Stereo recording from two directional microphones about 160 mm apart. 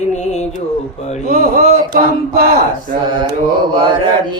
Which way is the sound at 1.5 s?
70° right (ahead or behind).